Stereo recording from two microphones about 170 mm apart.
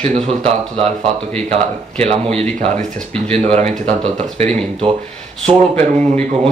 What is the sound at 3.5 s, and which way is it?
Speech, 40° right (ahead or behind).